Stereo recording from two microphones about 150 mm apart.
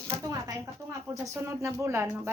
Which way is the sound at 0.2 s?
20° right (ahead or behind).